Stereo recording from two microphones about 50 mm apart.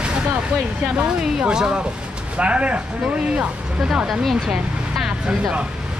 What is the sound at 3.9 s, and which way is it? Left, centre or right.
Speech, centre.